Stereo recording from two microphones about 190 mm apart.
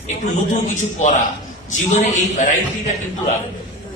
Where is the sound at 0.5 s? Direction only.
40° left (ahead or behind).